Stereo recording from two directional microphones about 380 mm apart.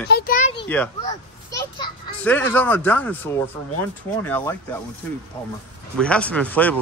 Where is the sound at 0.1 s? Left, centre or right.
Centre.